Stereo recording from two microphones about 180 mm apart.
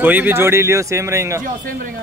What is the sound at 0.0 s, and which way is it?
Speech, 10° right (ahead or behind).